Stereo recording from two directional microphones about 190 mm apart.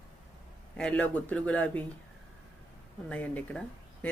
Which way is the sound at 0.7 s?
5° left (ahead or behind).